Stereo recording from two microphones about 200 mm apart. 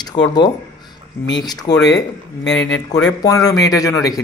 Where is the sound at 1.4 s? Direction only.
20° left (ahead or behind).